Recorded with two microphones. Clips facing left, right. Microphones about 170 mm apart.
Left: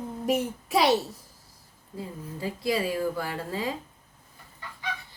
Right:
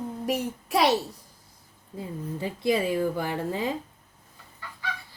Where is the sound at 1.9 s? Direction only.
20° right (ahead or behind).